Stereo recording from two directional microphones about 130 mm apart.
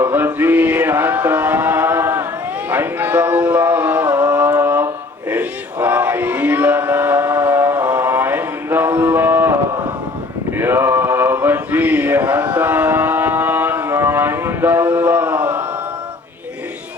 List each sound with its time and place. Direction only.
0.0 s male singing: 15° right (ahead or behind)
2.6 s a sound: 15° right (ahead or behind)
4.6 s mantra: 15° right (ahead or behind)
5.3 s choir: 10° right (ahead or behind)
10.6 s mantra: 15° right (ahead or behind)
13.9 s a sound: 20° right (ahead or behind)